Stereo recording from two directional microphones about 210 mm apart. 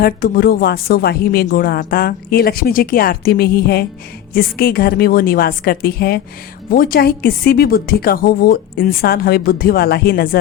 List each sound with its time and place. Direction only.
0.0 s speech: 45° left (ahead or behind)